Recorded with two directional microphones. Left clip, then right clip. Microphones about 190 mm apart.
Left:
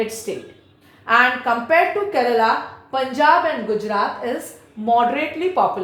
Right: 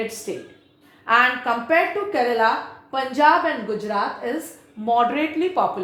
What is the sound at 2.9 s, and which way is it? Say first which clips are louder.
A woman's voice: left 2 dB; 20° right (ahead or behind).